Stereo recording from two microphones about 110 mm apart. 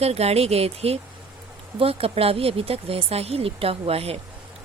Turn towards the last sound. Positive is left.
turn(degrees=-65)  # may be behind; listen again after turning